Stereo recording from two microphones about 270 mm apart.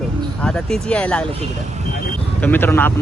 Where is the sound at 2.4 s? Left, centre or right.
Centre.